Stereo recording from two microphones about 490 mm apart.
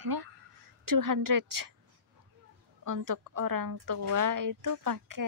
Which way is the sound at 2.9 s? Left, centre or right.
Right.